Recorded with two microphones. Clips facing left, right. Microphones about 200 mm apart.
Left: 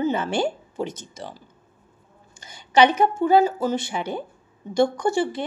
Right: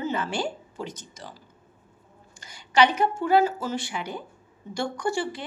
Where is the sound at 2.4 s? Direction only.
20° left (ahead or behind).